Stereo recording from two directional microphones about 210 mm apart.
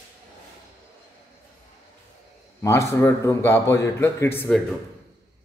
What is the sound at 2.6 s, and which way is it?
A man's voice, 15° left (ahead or behind).